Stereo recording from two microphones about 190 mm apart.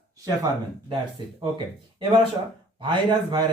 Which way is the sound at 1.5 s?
25° right (ahead or behind).